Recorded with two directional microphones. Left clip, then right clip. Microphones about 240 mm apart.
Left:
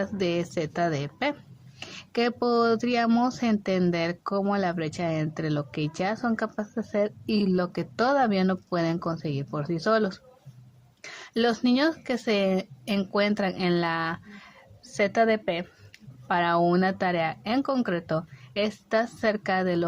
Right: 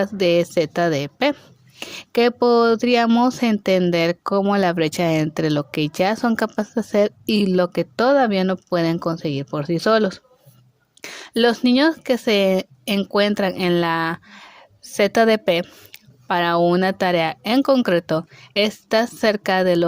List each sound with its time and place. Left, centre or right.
0.0 s speech: right